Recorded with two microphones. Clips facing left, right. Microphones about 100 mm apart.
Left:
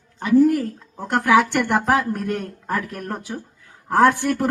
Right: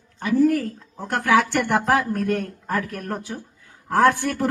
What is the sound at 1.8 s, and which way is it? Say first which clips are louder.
A man's voice: even; 20° left (ahead or behind).